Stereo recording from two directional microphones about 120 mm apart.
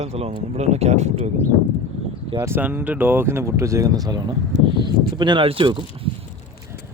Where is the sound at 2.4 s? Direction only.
20° right (ahead or behind); by 5.8 s 45° right (ahead or behind).